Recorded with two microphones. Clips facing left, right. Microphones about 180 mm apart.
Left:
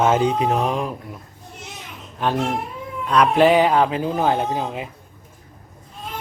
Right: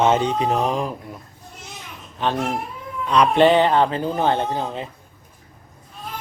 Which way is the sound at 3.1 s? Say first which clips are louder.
Even; 5° left (ahead or behind).